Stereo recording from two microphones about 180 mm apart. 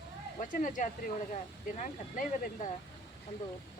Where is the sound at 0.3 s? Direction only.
45° left (ahead or behind).